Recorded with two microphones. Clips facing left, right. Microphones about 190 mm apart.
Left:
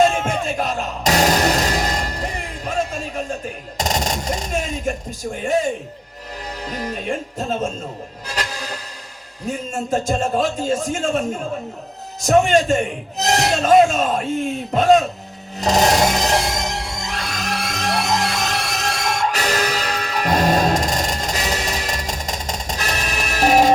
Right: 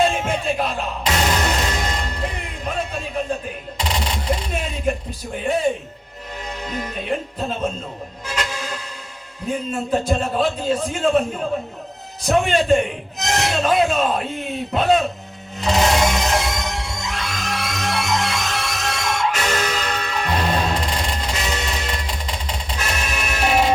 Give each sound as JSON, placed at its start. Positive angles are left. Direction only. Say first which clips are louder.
{"t": 0.0, "sound": "music", "louder": "left 2 dB", "side_deg": 50}
{"t": 3.8, "sound": "a sound", "louder": "left 4 dB", "side_deg": 45}
{"t": 6.7, "sound": "music", "louder": "even", "side_deg": 35}
{"t": 9.7, "sound": "a man's voice", "louder": "left 1 dB", "side_deg": 45}
{"t": 12.2, "sound": "a man's voice", "louder": "left 3 dB", "side_deg": 45}
{"t": 15.6, "sound": "music", "louder": "left 2 dB", "side_deg": 40}